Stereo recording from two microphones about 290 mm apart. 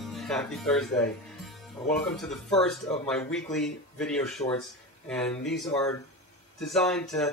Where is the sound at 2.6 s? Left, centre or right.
Centre.